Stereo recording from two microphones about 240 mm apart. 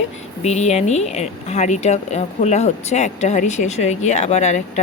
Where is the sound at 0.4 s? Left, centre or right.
Left.